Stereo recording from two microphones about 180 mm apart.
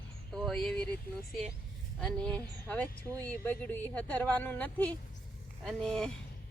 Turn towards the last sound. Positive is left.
turn(degrees=5)  # may be behind; listen again after turning